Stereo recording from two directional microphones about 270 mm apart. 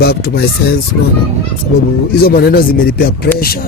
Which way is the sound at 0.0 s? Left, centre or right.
Left.